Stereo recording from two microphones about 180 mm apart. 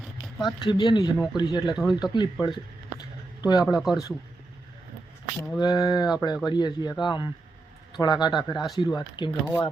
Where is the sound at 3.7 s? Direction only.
Centre (ahead or behind).